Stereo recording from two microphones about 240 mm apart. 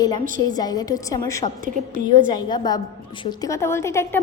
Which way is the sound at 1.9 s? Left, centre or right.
Right.